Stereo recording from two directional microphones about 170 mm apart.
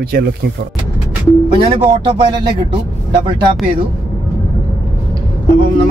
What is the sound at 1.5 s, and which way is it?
Speech, 30° right (ahead or behind).